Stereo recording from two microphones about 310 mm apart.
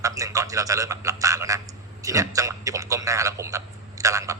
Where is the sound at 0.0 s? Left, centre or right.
Centre.